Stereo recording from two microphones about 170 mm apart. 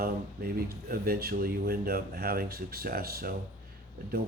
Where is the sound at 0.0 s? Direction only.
60° right (ahead or behind).